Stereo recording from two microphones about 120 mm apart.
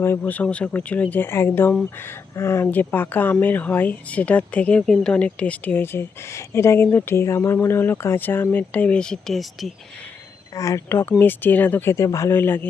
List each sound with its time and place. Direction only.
0.0 s speech: 15° left (ahead or behind); by 9.7 s centre (ahead or behind)
10.5 s speech: 30° left (ahead or behind)